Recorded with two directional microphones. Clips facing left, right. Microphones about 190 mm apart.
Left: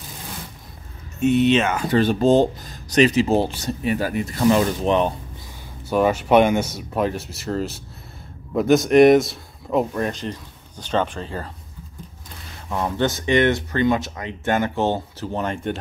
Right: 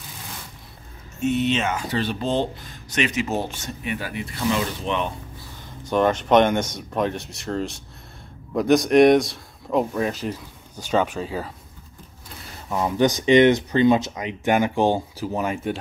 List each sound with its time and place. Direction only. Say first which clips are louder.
1.2 s speech: left 5 dB; 65° left (ahead or behind); by 5.1 s 40° left (ahead or behind)
5.9 s a man's voice: left 1 dB; 5° left (ahead or behind)
12.6 s speech: right 2 dB; 10° right (ahead or behind)